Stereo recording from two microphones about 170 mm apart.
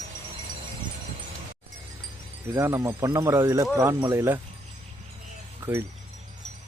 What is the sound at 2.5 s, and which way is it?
Speech, 15° right (ahead or behind).